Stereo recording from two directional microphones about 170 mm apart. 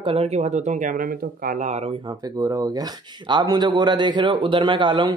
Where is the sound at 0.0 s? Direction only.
35° right (ahead or behind).